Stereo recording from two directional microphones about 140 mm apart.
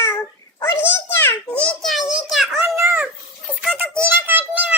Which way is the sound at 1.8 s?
Centre (ahead or behind).